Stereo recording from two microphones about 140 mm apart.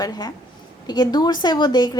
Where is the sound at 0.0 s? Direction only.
30° left (ahead or behind).